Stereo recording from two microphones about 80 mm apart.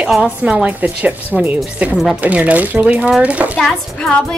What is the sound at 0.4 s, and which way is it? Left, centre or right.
A woman's voice, centre.